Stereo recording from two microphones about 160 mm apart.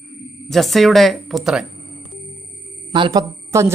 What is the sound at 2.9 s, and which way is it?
Speech, 30° right (ahead or behind).